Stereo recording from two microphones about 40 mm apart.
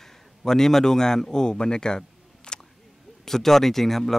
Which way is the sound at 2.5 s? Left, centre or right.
Centre.